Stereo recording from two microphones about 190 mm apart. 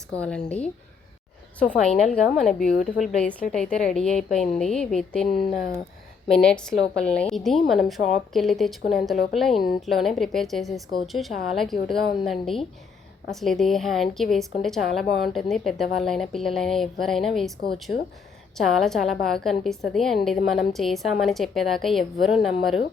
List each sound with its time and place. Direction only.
0.2 s speech: 5° left (ahead or behind)
2.0 s speech: centre (ahead or behind)
17.9 s speech: 55° left (ahead or behind)
18.5 s speech: centre (ahead or behind)